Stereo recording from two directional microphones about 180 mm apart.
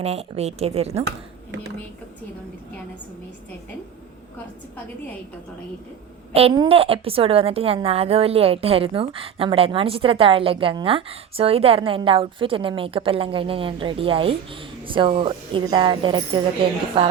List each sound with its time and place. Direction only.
0.0 s a woman's voice: 35° right (ahead or behind)
6.3 s a woman's voice: 35° right (ahead or behind)